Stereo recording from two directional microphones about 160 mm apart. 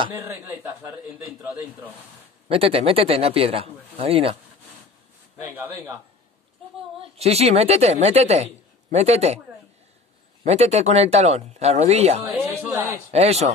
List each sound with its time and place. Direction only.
0.2 s speech: 15° right (ahead or behind)
2.4 s speech: 35° right (ahead or behind)
5.5 s speech: 15° right (ahead or behind)
7.0 s speech: 40° right (ahead or behind)
10.4 s speech: 40° right (ahead or behind)
12.7 s a man's voice: 20° right (ahead or behind)
13.1 s speech: 40° right (ahead or behind)